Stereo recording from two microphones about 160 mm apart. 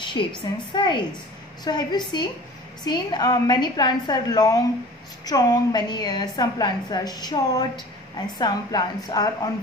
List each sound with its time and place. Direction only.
0.0 s a woman's voice: 30° left (ahead or behind)